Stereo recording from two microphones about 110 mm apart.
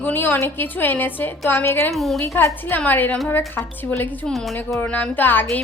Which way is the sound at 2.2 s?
25° left (ahead or behind).